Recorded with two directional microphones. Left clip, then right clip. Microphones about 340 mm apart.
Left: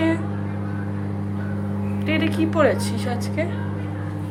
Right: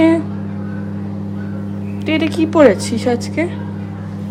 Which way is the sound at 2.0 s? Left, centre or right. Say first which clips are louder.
Right 6 dB; centre.